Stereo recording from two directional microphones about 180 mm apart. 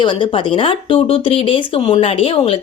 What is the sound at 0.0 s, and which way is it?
Speech, 25° left (ahead or behind).